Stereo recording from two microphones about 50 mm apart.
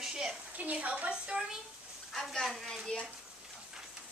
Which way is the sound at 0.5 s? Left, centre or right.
Right.